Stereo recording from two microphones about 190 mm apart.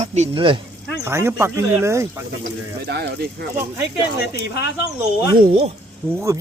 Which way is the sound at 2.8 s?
55° right (ahead or behind).